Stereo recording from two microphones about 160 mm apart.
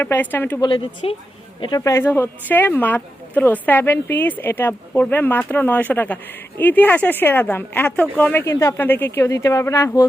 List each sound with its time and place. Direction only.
0.0 s speech: 10° left (ahead or behind)
0.6 s a woman's voice: 30° left (ahead or behind)